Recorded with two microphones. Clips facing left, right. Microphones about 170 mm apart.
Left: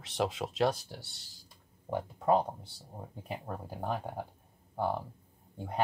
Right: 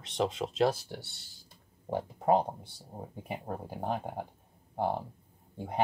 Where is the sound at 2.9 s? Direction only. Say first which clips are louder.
Right 2 dB; 25° right (ahead or behind).